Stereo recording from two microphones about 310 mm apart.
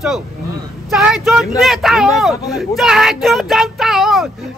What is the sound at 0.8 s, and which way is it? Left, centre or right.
Speech, centre.